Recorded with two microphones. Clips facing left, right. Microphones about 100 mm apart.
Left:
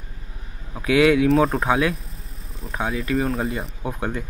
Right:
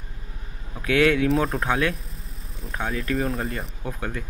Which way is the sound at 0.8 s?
5° left (ahead or behind).